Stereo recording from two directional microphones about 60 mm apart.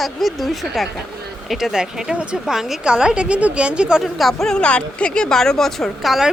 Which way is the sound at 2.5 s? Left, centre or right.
Centre.